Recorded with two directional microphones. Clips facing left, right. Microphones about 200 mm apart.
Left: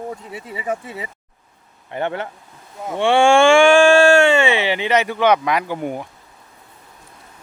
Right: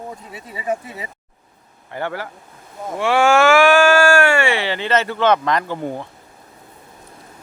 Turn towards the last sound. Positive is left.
turn(degrees=15)  # may be behind; listen again after turning